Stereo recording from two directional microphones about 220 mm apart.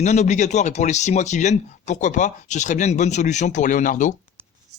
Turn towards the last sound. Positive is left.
turn(degrees=35)  # may be behind; listen again after turning